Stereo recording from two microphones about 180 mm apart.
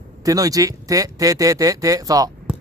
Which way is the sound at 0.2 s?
20° right (ahead or behind).